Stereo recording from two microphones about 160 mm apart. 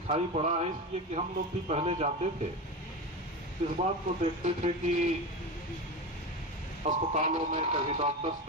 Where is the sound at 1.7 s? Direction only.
40° right (ahead or behind).